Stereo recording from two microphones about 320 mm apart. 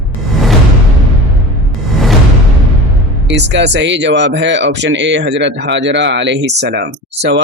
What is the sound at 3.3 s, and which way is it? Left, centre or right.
Speech, right.